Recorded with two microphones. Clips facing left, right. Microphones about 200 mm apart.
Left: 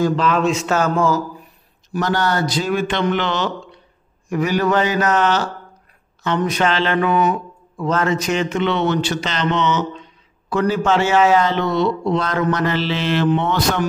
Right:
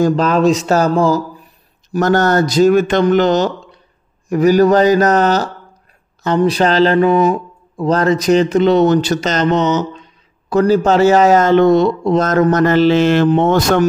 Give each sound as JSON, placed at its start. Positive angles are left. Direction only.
{"t": 0.0, "sound": "speech", "side_deg": -40}
{"t": 1.9, "sound": "speech", "side_deg": -45}